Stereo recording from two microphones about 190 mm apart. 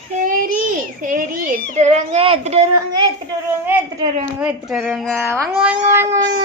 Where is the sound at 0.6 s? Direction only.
45° right (ahead or behind).